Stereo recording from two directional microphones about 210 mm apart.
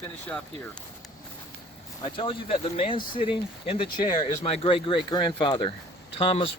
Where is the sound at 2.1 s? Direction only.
25° left (ahead or behind).